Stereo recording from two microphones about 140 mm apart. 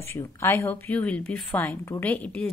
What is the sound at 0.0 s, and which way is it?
A woman's voice, 20° left (ahead or behind).